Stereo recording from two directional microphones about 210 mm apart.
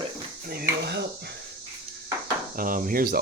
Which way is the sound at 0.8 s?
50° right (ahead or behind).